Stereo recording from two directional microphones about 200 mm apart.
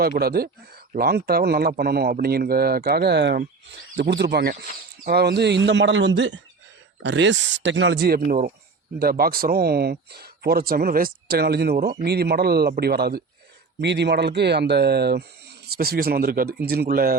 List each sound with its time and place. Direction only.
0.0 s speech: 50° right (ahead or behind)
8.3 s speech: 40° right (ahead or behind)